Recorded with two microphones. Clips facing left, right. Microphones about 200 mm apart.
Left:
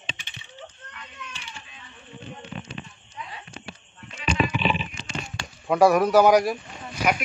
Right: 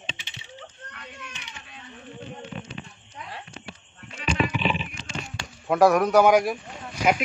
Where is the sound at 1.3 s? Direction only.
20° right (ahead or behind).